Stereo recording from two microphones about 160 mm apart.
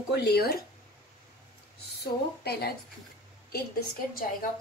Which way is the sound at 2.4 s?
80° left.